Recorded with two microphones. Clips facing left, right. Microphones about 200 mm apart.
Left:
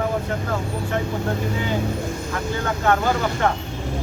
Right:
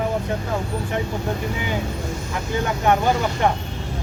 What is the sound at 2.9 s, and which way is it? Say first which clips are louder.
Speech: right 1 dB; 15° right (ahead or behind).